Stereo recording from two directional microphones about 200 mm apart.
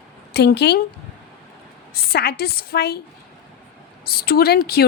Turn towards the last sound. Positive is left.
turn(degrees=50)  # may be behind; listen again after turning